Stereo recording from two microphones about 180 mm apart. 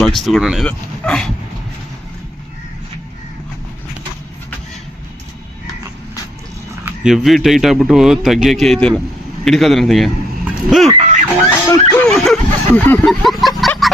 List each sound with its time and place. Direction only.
0.0 s speech: centre (ahead or behind)
6.8 s speech: 5° right (ahead or behind)
11.7 s laughter: 20° left (ahead or behind)
12.0 s a sound: centre (ahead or behind)
13.1 s speech: centre (ahead or behind)
13.6 s a sound: centre (ahead or behind)